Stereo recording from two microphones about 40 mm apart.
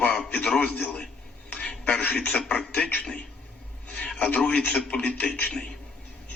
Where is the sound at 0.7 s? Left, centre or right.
Left.